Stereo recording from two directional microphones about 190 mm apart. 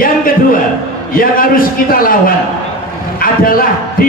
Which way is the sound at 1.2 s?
50° left (ahead or behind).